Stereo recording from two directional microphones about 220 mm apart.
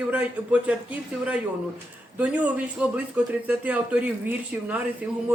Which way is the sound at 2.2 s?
5° right (ahead or behind).